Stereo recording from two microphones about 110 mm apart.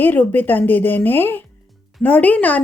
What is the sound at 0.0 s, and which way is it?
A woman's voice, 15° left (ahead or behind).